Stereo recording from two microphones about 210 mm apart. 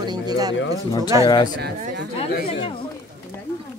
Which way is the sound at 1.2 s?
20° left (ahead or behind).